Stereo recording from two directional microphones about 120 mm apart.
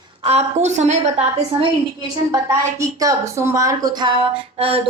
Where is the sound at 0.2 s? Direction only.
60° right (ahead or behind).